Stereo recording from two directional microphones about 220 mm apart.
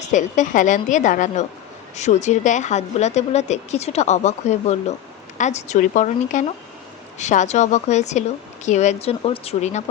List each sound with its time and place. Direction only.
0.0 s a woman's voice: 35° left (ahead or behind)